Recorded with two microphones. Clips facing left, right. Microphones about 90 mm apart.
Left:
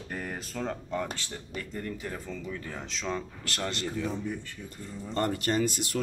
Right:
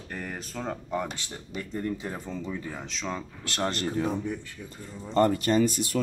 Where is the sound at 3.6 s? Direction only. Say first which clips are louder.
Right 5 dB; 40° right (ahead or behind).